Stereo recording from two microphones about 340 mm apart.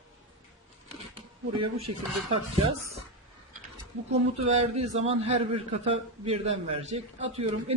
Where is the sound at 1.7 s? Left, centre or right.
Centre.